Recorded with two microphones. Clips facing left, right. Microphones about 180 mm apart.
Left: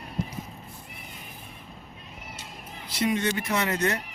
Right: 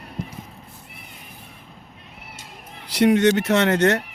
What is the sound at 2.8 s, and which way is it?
Speech, 75° right (ahead or behind).